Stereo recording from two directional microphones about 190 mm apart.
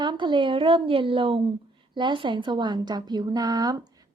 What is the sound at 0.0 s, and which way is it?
Speech, 25° right (ahead or behind).